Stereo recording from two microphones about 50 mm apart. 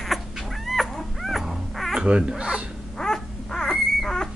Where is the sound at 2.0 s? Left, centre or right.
Centre.